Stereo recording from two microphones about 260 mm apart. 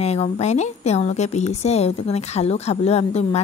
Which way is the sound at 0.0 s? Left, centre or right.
Left.